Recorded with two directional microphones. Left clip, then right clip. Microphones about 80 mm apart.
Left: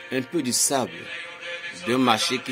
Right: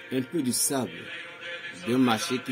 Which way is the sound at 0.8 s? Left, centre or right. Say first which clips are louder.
Left 4 dB; left.